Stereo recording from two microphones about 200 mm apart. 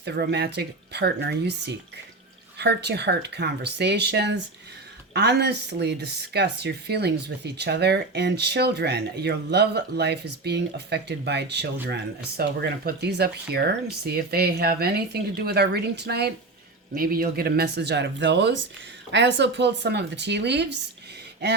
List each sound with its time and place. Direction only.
0.0 s speech: 55° right (ahead or behind)